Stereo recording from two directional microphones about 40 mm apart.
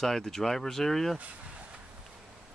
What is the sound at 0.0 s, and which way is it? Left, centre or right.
Speech, centre.